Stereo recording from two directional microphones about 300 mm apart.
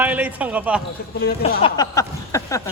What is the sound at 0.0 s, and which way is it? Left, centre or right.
Speech, centre.